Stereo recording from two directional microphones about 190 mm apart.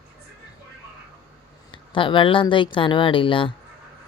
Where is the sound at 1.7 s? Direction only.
25° left (ahead or behind).